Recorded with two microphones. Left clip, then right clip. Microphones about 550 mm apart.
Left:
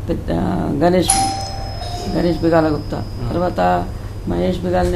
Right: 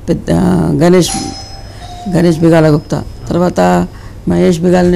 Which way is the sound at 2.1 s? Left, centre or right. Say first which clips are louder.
Right 7 dB; right.